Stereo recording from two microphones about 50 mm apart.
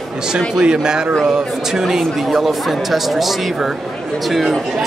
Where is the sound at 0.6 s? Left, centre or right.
Centre.